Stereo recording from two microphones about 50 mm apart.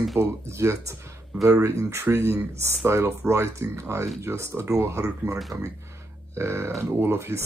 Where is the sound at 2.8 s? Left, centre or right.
Right.